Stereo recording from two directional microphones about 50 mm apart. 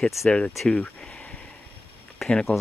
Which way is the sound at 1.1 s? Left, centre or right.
Left.